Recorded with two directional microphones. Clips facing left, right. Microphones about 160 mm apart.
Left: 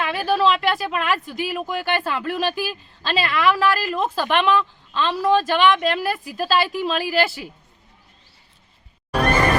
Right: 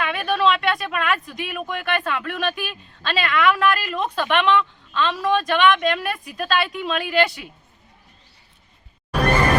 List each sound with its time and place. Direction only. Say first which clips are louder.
0.0 s a woman's voice: left 1 dB; 30° left (ahead or behind)